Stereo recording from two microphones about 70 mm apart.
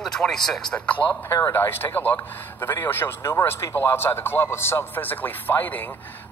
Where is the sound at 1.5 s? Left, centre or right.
Left.